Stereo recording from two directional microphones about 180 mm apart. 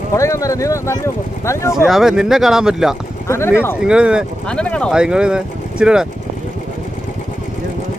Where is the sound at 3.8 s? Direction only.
5° right (ahead or behind).